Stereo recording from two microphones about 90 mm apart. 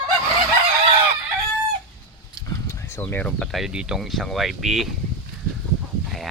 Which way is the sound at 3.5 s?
5° right (ahead or behind).